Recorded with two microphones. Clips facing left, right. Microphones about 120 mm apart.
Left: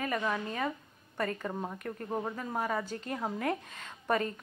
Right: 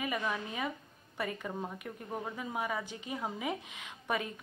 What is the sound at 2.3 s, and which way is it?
A woman's voice, 10° right (ahead or behind).